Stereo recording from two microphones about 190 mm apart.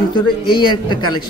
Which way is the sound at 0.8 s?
25° left (ahead or behind).